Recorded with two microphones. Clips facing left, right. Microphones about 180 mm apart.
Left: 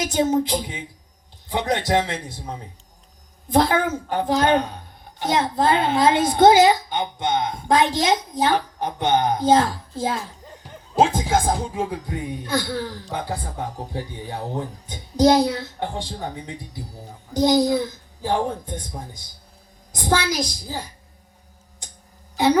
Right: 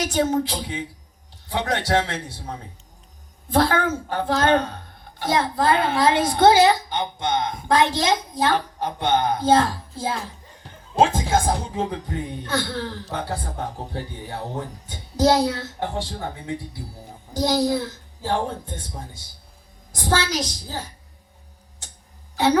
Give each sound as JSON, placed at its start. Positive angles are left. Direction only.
{"t": 0.0, "sound": "speech", "side_deg": 15}
{"t": 11.1, "sound": "speech", "side_deg": 15}